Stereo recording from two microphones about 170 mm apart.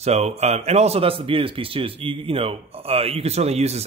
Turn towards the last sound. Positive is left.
turn(degrees=-40)  # may be behind; listen again after turning